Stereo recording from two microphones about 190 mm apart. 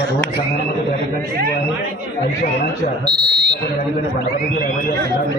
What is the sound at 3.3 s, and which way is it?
Speech, 60° right (ahead or behind).